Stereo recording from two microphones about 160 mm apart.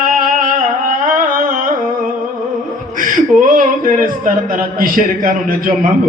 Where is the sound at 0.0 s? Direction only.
55° right (ahead or behind).